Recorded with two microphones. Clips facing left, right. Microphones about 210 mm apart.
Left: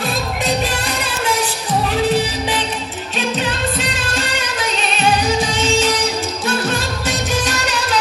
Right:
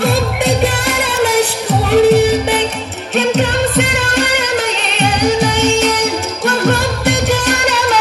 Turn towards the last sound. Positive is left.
turn(degrees=-65)  # may be behind; listen again after turning